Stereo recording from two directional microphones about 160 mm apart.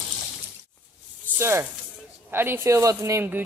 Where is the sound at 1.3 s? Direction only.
15° right (ahead or behind).